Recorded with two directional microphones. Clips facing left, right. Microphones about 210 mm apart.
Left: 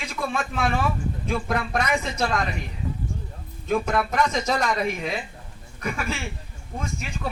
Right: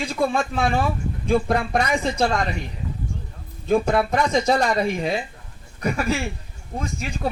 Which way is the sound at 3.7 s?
35° right (ahead or behind).